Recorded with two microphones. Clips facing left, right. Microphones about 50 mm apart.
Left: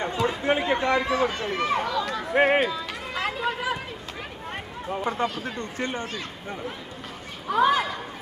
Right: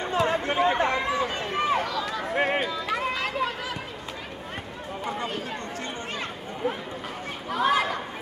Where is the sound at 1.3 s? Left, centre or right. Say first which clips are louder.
Even; right.